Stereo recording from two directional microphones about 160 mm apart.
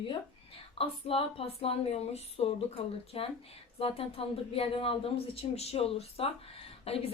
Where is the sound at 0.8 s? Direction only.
35° left (ahead or behind).